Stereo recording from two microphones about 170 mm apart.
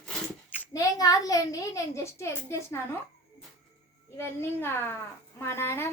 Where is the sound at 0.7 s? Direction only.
20° left (ahead or behind).